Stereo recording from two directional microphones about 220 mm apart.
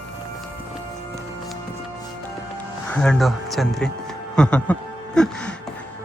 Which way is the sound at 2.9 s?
5° left (ahead or behind).